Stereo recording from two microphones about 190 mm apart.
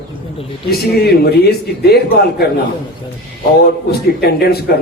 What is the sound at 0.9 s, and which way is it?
A man's voice, 55° left (ahead or behind).